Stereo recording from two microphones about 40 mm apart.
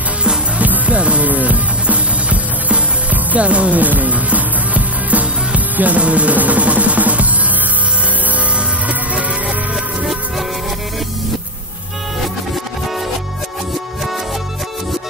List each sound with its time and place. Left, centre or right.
0.6 s music: right
8.5 s music: right